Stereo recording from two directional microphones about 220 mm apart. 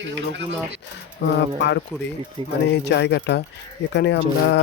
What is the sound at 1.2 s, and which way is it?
Speech, 50° left (ahead or behind).